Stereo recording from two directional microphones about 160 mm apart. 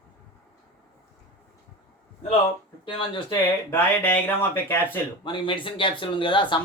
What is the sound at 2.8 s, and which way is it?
Speech, 30° left (ahead or behind).